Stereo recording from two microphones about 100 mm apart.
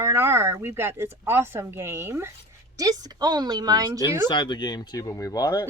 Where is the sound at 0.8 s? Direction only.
25° right (ahead or behind).